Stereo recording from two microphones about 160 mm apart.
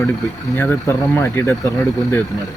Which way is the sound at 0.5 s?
10° left (ahead or behind).